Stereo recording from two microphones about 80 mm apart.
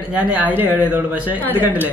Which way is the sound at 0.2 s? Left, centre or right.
Right.